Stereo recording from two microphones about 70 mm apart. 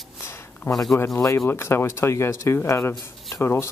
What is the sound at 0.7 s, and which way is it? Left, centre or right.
Speech, centre.